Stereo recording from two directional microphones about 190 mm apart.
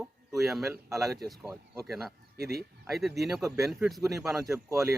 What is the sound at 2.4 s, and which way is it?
Speech, 55° right (ahead or behind).